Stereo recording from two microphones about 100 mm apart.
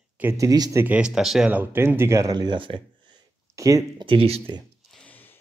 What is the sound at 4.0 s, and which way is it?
Speech, 65° right (ahead or behind).